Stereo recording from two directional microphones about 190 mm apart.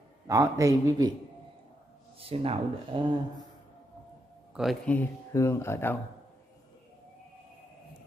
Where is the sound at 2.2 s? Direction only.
30° right (ahead or behind).